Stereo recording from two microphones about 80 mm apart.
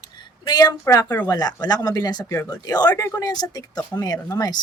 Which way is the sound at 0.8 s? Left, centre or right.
Left.